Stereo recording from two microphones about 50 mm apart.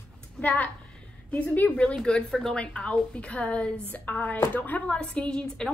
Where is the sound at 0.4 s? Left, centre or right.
Left.